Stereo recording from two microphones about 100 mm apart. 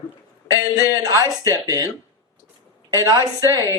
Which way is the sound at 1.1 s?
35° right (ahead or behind).